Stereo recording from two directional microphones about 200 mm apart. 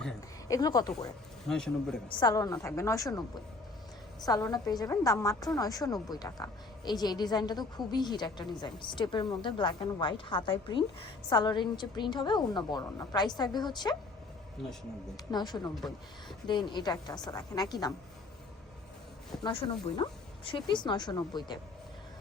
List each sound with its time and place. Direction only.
0.4 s a woman's voice: 20° left (ahead or behind)
1.5 s a man's voice: 5° left (ahead or behind)
2.0 s a woman's voice: 20° left (ahead or behind)
4.3 s a woman's voice: 20° left (ahead or behind)
15.1 s a woman's voice: 20° left (ahead or behind)
19.4 s a woman's voice: 25° left (ahead or behind)